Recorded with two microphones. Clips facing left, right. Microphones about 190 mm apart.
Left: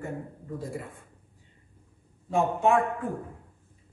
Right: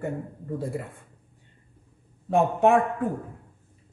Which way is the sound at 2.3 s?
60° right (ahead or behind).